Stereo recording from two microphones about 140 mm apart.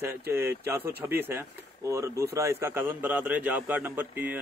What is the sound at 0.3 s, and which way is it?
A man's voice, 15° right (ahead or behind).